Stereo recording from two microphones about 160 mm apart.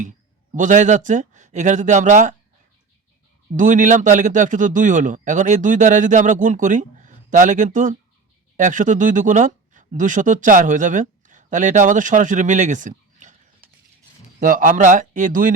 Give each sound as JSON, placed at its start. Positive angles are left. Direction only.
{"t": 0.5, "sound": "speech", "side_deg": -50}
{"t": 3.5, "sound": "speech", "side_deg": -50}
{"t": 14.3, "sound": "speech", "side_deg": -55}